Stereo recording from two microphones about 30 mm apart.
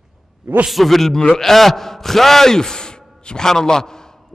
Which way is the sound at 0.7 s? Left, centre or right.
Centre.